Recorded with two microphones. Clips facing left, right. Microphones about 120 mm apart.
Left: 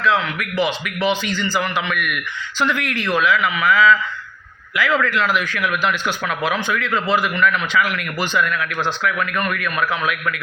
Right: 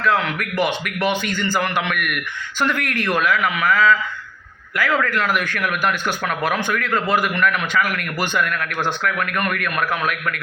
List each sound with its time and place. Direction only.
0.0 s speech: 50° right (ahead or behind)
4.9 s speech: 45° right (ahead or behind)